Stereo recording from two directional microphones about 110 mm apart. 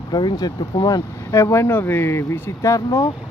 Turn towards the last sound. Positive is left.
turn(degrees=30)  # may be behind; listen again after turning